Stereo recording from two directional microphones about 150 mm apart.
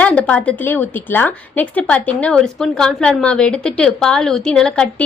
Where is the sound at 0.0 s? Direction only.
10° left (ahead or behind).